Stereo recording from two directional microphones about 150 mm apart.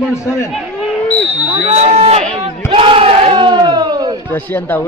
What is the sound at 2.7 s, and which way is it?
Battle cry, 35° right (ahead or behind).